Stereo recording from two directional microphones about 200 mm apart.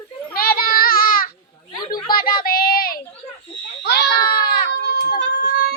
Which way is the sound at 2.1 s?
45° left (ahead or behind).